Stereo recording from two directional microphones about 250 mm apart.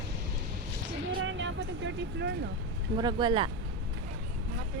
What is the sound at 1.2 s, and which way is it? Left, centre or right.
Vehicle, right.